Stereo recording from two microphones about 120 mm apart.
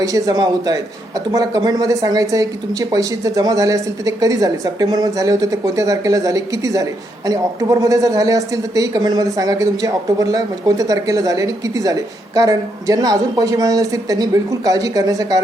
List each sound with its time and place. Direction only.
0.0 s a man's voice: 30° right (ahead or behind)